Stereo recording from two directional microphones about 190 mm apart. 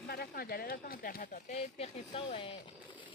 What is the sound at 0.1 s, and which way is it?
Speech, 55° left (ahead or behind).